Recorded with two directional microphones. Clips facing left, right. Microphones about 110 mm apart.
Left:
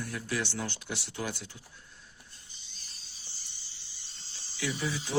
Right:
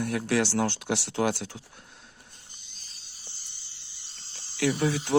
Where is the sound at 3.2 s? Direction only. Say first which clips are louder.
Right 2 dB; 55° right (ahead or behind).